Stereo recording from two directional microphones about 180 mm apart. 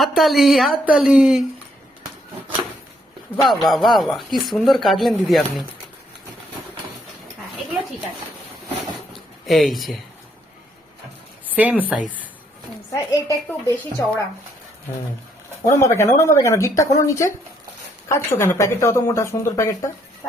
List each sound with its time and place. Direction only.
0.0 s speech: centre (ahead or behind)
3.4 s speech: centre (ahead or behind)
9.1 s a sound: centre (ahead or behind)
11.4 s a woman's voice: 10° right (ahead or behind)
12.9 s a woman's voice: 15° left (ahead or behind)
15.6 s a woman's voice: 15° left (ahead or behind)